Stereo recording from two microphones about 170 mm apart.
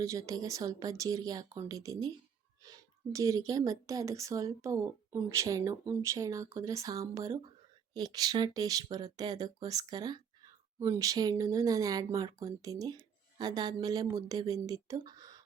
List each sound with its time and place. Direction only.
0.0 s speech: 20° right (ahead or behind)